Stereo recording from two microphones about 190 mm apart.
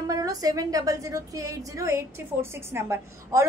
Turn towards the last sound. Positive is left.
turn(degrees=-15)  # may be behind; listen again after turning